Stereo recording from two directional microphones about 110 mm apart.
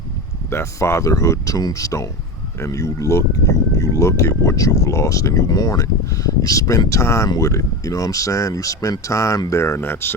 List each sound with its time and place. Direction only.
0.5 s speech: 25° left (ahead or behind)